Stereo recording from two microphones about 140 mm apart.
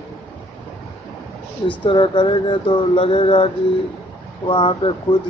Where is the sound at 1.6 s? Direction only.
35° left (ahead or behind).